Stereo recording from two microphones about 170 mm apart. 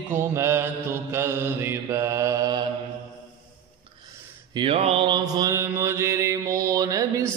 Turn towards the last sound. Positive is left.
turn(degrees=-20)  # may be behind; listen again after turning